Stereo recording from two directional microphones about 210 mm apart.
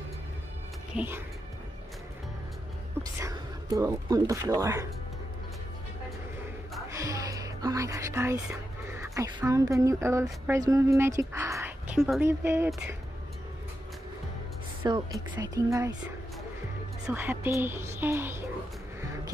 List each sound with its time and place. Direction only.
0.9 s a woman's voice: 10° right (ahead or behind)
3.0 s speech: 15° right (ahead or behind)
6.9 s speech: 15° right (ahead or behind)
14.8 s a woman's voice: 20° right (ahead or behind)
17.0 s a woman's voice: 10° right (ahead or behind)